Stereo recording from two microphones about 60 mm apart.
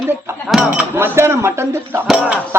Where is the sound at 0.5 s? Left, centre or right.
Centre.